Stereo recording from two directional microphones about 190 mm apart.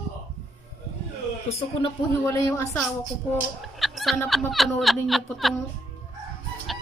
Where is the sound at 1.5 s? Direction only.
35° left (ahead or behind).